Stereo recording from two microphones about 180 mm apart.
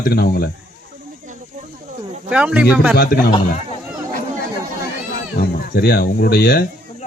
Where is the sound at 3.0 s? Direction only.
55° left (ahead or behind).